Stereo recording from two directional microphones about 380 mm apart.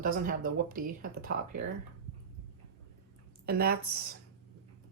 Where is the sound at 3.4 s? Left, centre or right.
Right.